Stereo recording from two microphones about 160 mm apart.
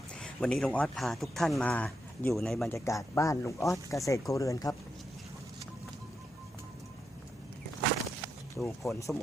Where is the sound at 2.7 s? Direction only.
20° left (ahead or behind).